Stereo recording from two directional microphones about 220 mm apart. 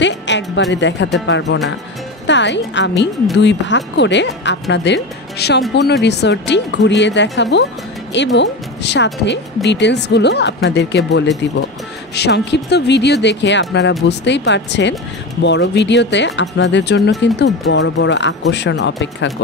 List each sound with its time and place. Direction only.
0.0 s speech: 55° left (ahead or behind)
12.2 s speech: 50° left (ahead or behind)